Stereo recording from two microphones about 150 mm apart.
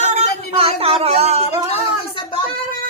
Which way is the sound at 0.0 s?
50° right (ahead or behind).